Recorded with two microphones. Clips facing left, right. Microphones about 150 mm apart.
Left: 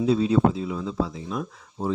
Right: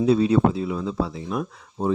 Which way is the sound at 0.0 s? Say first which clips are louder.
Right 2 dB; 65° right (ahead or behind).